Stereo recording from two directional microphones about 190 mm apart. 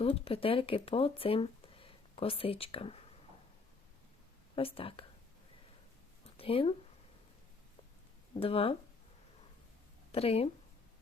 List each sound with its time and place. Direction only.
0.0 s speech: 30° left (ahead or behind)
4.5 s speech: 30° left (ahead or behind)
6.3 s speech: 30° left (ahead or behind)
8.4 s speech: 30° left (ahead or behind)
10.1 s speech: 30° left (ahead or behind)